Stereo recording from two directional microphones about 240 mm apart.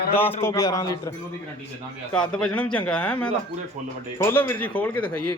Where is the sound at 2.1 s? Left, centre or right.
Centre.